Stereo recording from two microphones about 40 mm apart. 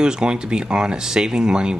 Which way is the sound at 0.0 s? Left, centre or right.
Right.